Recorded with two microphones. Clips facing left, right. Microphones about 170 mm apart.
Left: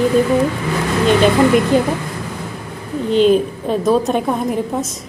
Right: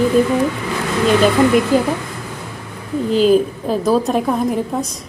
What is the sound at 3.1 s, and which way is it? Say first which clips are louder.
A woman's voice: left 1 dB; centre (ahead or behind).